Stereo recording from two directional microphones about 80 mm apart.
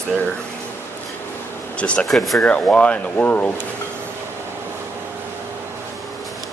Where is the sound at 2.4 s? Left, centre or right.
Centre.